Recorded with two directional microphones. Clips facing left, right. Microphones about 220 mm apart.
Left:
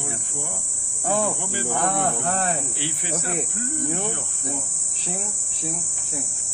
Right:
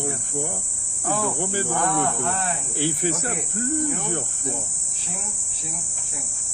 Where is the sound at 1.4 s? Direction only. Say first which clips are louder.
Right 4 dB; 45° right (ahead or behind).